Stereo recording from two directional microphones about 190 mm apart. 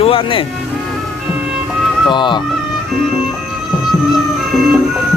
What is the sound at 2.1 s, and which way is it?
Speech, 25° left (ahead or behind).